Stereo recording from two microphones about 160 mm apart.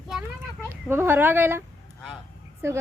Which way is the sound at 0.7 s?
15° right (ahead or behind).